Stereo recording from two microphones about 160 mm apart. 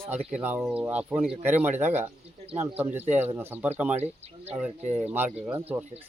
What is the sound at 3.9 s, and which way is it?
Speech, 45° right (ahead or behind).